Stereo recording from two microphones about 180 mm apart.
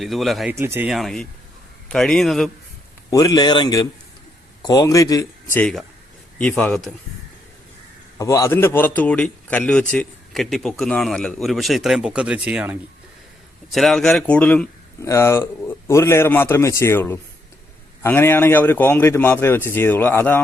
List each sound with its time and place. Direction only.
0.0 s a man's voice: centre (ahead or behind)
0.5 s speech: 15° right (ahead or behind)
0.9 s a man's voice: centre (ahead or behind)
3.1 s speech: 20° left (ahead or behind); by 6.9 s 5° left (ahead or behind)
8.2 s a man's voice: 15° left (ahead or behind)